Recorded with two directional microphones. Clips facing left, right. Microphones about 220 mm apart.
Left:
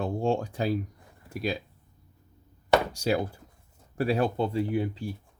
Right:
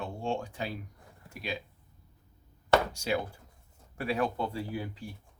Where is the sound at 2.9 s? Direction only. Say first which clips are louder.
Left 5 dB; 40° left (ahead or behind).